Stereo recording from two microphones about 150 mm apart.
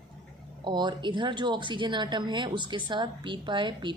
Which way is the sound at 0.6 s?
30° right (ahead or behind).